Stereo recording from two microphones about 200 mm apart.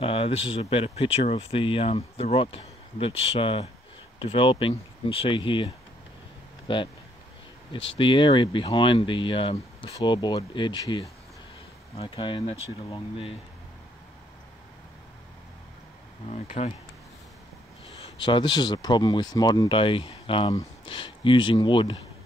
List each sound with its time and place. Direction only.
0.0 s speech: 25° left (ahead or behind)
6.7 s speech: 25° left (ahead or behind)
8.0 s speech: 25° left (ahead or behind)
16.3 s speech: 35° left (ahead or behind)
17.8 s speech: 25° left (ahead or behind)